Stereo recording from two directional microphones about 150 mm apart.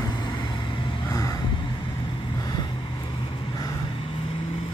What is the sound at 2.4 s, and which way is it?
Vehicle, 25° left (ahead or behind).